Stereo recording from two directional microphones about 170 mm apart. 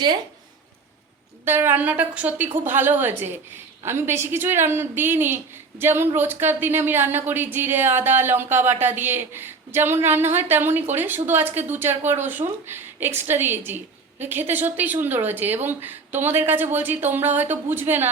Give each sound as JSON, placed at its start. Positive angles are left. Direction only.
{"t": 1.5, "sound": "a woman's voice", "side_deg": -10}